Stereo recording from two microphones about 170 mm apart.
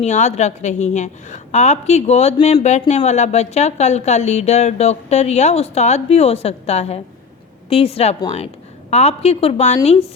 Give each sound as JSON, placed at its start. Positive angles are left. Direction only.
{"t": 0.0, "sound": "a woman's voice", "side_deg": 40}